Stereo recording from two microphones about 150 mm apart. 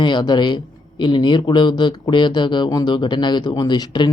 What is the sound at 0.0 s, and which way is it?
A man's voice, 30° left (ahead or behind).